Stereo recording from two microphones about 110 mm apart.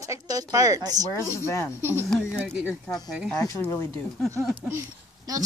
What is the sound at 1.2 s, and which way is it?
Speech, 25° left (ahead or behind).